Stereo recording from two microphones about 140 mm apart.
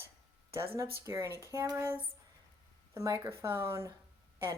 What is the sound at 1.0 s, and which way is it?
A woman's voice, 20° right (ahead or behind).